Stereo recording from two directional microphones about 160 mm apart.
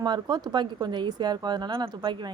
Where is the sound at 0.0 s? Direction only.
25° right (ahead or behind).